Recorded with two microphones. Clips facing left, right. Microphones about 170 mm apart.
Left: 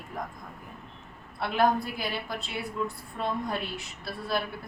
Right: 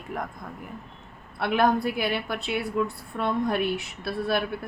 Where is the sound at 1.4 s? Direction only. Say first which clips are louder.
Right 3 dB; 65° right (ahead or behind).